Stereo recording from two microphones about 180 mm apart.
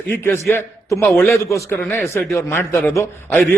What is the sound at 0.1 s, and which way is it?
Speech, 10° left (ahead or behind).